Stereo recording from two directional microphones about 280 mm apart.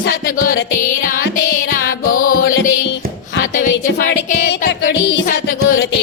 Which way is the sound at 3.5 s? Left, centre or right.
Left.